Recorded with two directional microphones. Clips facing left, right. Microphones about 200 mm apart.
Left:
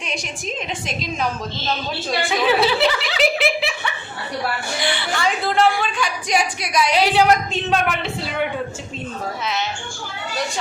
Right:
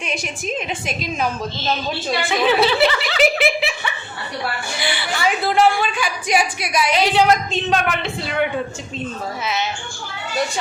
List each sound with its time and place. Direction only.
0.0 s a woman's voice: 5° right (ahead or behind)
3.2 s giggle: centre (ahead or behind)
4.8 s a woman's voice: 5° right (ahead or behind)
6.9 s a woman's voice: 10° left (ahead or behind)